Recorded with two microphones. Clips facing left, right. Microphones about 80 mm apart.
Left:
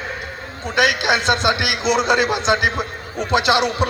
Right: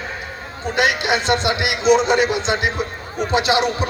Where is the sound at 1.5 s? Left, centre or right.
Left.